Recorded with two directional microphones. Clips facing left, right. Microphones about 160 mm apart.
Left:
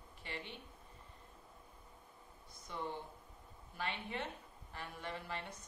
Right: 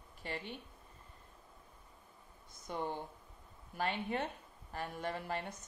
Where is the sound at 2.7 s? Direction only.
55° right (ahead or behind).